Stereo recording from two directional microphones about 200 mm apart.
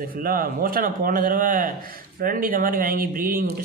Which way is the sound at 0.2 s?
45° right (ahead or behind).